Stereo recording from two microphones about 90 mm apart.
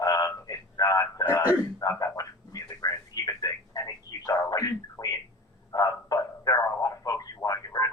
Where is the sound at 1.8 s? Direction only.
40° left (ahead or behind).